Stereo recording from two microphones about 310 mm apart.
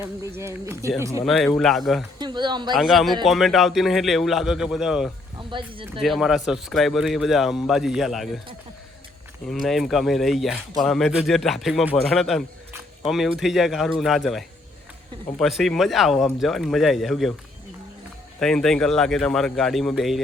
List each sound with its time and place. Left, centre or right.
0.0 s speech: centre
1.2 s speech: centre
2.1 s speech: centre
2.7 s speech: centre
5.4 s speech: centre
6.0 s speech: centre
9.5 s speech: centre
18.3 s speech: centre